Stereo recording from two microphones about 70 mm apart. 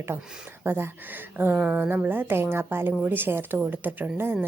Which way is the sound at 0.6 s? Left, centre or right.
Right.